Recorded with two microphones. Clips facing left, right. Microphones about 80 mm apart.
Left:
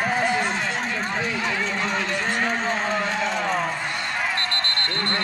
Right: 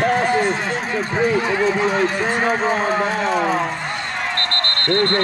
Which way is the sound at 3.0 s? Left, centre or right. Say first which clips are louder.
Right 6 dB; right.